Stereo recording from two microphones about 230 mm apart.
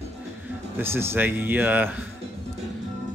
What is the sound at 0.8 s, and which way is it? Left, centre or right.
Speech, centre.